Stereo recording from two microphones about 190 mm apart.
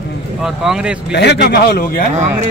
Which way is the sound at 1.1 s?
60° left (ahead or behind).